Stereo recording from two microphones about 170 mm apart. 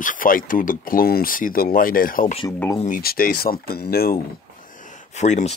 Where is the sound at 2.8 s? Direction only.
60° left (ahead or behind).